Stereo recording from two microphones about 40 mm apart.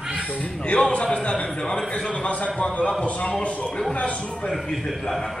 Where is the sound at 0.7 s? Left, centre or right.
Left.